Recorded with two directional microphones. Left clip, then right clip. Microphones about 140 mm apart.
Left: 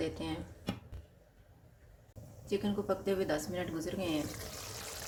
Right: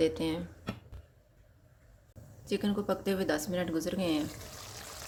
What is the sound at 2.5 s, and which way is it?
Speech, 75° right (ahead or behind).